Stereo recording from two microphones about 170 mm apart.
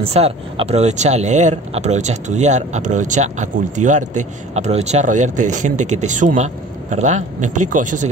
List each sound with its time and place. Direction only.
0.0 s speech: 35° right (ahead or behind)